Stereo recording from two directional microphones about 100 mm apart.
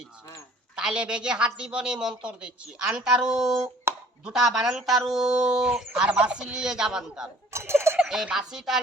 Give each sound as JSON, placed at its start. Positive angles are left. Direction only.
{"t": 0.8, "sound": "speech", "side_deg": -10}
{"t": 7.5, "sound": "speech", "side_deg": -25}
{"t": 7.9, "sound": "speech", "side_deg": -5}